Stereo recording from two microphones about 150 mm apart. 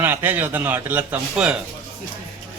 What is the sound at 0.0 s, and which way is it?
A man's voice, 15° right (ahead or behind).